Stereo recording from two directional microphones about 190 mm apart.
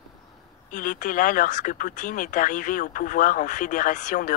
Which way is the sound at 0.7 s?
45° left (ahead or behind).